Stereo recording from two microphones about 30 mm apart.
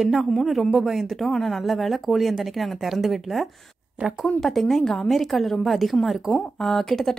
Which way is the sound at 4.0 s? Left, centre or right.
Right.